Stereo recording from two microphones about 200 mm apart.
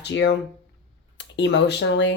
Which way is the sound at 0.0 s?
60° left (ahead or behind).